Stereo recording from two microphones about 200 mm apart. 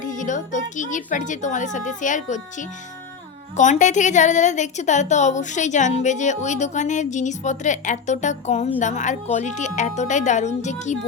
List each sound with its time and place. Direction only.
0.0 s a woman's voice: 40° left (ahead or behind)